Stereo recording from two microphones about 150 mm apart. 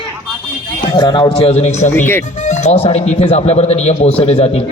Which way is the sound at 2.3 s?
50° left (ahead or behind).